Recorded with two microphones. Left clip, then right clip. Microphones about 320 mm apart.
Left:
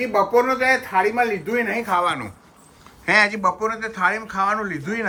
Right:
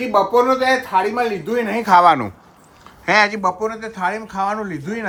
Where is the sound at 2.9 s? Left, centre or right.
Centre.